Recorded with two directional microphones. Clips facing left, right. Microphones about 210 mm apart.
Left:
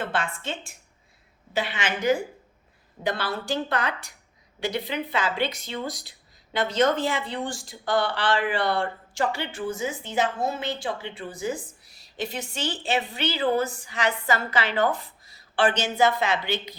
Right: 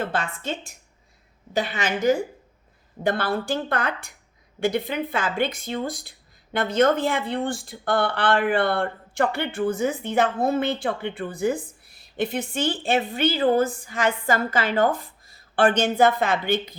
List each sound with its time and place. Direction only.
1.5 s a woman's voice: 40° right (ahead or behind)
3.0 s speech: 50° right (ahead or behind)